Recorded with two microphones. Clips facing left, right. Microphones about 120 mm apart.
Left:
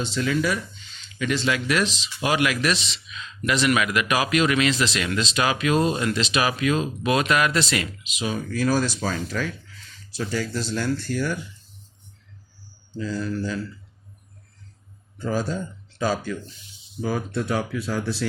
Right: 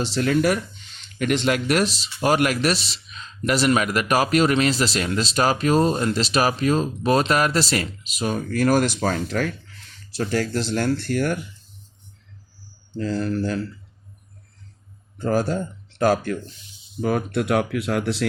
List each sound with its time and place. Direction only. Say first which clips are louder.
0.1 s speech: right 4 dB; 50° right (ahead or behind)
13.0 s speech: right 4 dB; 60° right (ahead or behind)
15.2 s speech: right 4 dB; 55° right (ahead or behind)